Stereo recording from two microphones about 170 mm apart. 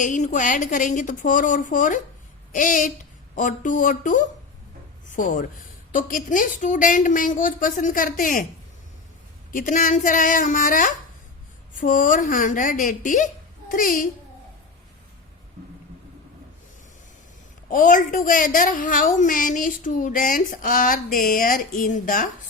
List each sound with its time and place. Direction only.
0.0 s a woman's voice: 45° left (ahead or behind)
9.5 s a woman's voice: 50° left (ahead or behind)
17.7 s a woman's voice: 50° left (ahead or behind)